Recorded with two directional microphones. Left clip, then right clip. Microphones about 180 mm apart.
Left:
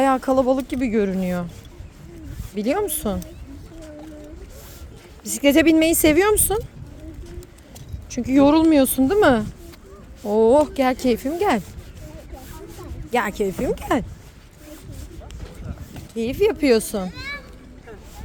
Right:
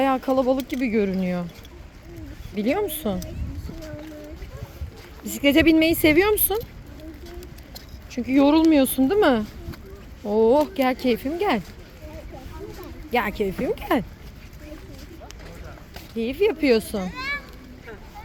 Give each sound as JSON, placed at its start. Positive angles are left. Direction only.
{"t": 0.0, "sound": "speech", "side_deg": 20}
{"t": 2.6, "sound": "speech", "side_deg": 15}
{"t": 5.2, "sound": "speech", "side_deg": 10}
{"t": 8.3, "sound": "speech", "side_deg": 15}
{"t": 13.1, "sound": "speech", "side_deg": 15}
{"t": 16.1, "sound": "speech", "side_deg": 20}
{"t": 17.0, "sound": "a sound", "side_deg": 40}